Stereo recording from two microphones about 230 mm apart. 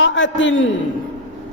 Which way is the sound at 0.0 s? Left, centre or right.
Left.